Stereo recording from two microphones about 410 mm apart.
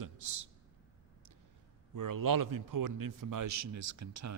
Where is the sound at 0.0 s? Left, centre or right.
Right.